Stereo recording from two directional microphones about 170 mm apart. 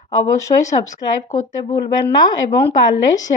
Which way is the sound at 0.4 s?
20° left (ahead or behind).